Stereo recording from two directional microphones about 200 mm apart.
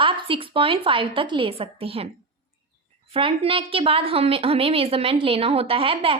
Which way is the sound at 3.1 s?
30° right (ahead or behind).